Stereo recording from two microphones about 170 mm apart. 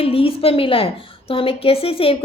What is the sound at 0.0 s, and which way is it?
A woman's voice, 35° left (ahead or behind).